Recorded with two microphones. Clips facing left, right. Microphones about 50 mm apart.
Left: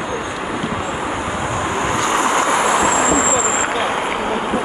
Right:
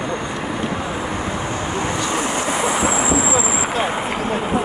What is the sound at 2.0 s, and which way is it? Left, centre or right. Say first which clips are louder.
Vehicle: left 5 dB; left.